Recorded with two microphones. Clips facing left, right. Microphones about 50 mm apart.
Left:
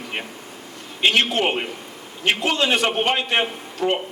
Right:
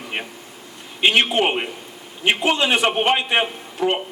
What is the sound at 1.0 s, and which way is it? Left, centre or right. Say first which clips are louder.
A man's voice: right 2 dB; centre.